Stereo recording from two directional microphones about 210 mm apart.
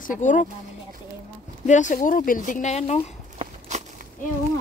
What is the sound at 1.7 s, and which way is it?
Speech, 35° left (ahead or behind).